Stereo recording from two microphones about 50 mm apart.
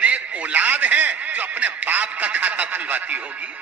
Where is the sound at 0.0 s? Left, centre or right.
Right.